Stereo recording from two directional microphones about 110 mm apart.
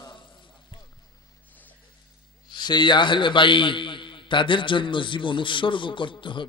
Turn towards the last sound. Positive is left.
turn(degrees=50)  # may be behind; listen again after turning